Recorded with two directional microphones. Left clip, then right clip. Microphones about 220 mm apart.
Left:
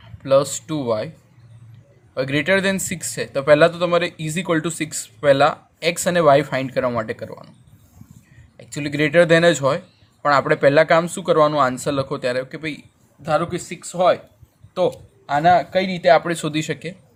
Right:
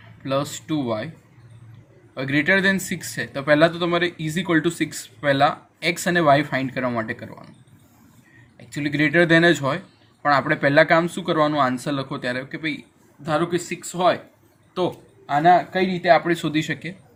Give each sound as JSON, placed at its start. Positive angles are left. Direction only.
{"t": 0.2, "sound": "speech", "side_deg": 40}
{"t": 2.1, "sound": "speech", "side_deg": 35}
{"t": 8.5, "sound": "speech", "side_deg": 35}